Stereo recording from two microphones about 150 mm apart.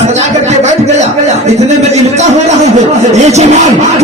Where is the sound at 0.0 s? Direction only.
50° right (ahead or behind).